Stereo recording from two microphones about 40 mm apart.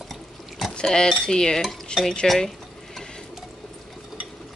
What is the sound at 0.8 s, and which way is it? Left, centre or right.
Cutlery, centre.